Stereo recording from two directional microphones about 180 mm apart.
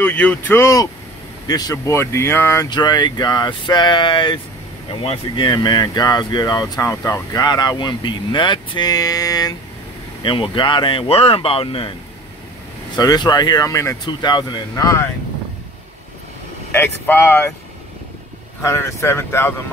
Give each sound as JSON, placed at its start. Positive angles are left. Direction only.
{"t": 0.0, "sound": "speech", "side_deg": 10}
{"t": 12.9, "sound": "speech", "side_deg": 25}
{"t": 16.7, "sound": "speech", "side_deg": 10}
{"t": 18.6, "sound": "speech", "side_deg": 15}